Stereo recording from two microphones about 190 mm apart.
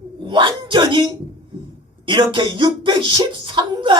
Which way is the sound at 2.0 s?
25° right (ahead or behind).